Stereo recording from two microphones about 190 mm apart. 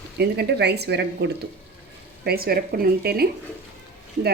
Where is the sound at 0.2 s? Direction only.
60° right (ahead or behind).